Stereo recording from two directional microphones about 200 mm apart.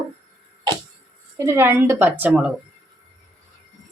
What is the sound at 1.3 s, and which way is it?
A woman's voice, 15° right (ahead or behind).